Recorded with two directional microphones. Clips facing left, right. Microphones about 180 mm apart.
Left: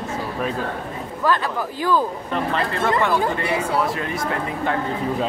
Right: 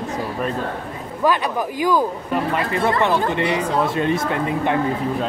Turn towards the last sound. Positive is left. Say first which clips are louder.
# right 3 dB
turn(degrees=-20)  # may be behind; listen again after turning